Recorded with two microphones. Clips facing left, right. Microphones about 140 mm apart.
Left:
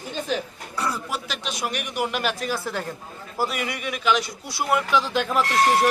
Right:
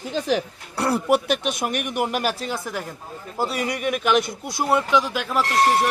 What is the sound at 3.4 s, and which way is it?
A man's voice, 30° right (ahead or behind).